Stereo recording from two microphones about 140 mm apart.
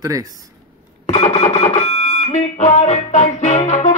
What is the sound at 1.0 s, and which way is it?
Alarm clock, 55° left (ahead or behind).